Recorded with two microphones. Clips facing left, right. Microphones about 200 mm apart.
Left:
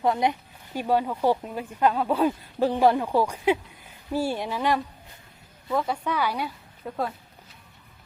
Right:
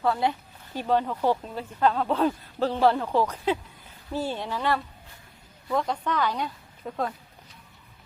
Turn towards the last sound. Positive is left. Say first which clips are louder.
# even
turn(degrees=5)  # may be behind; listen again after turning